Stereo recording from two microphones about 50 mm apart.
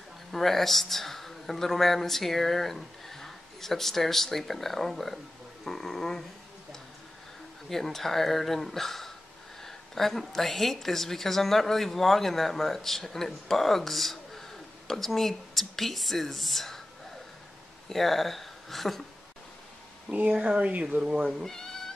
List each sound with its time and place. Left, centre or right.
0.3 s a man's voice: centre
7.7 s a man's voice: centre
17.8 s speech: centre
20.1 s speech: right
21.5 s cat: centre